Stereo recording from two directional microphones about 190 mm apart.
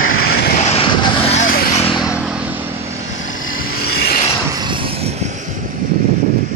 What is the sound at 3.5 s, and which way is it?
Vehicle, 50° left (ahead or behind).